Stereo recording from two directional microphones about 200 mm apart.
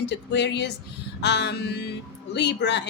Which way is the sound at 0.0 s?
60° left (ahead or behind).